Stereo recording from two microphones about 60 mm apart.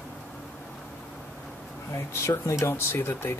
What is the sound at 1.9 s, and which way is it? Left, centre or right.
Speech, left.